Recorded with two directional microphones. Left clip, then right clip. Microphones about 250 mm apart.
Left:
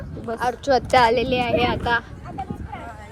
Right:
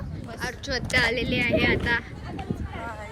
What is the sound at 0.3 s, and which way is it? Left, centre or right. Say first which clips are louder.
Speech: left 11 dB; centre.